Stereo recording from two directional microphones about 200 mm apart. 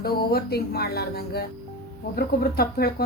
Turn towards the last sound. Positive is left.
turn(degrees=50)  # may be behind; listen again after turning